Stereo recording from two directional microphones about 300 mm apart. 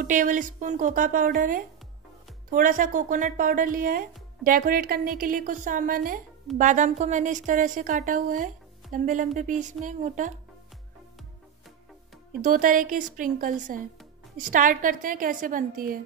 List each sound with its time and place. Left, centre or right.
0.0 s a woman's voice: right
12.4 s a woman's voice: right